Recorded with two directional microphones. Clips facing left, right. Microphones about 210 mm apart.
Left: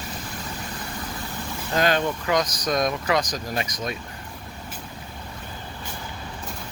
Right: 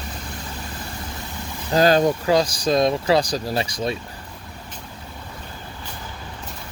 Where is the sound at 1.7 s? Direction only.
35° right (ahead or behind).